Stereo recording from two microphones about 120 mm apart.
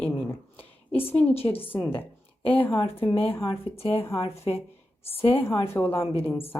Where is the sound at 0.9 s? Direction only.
10° left (ahead or behind).